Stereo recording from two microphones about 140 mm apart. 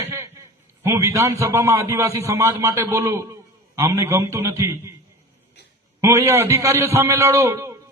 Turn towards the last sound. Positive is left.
turn(degrees=-20)  # may be behind; listen again after turning